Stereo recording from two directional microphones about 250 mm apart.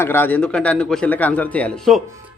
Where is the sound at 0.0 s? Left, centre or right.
Centre.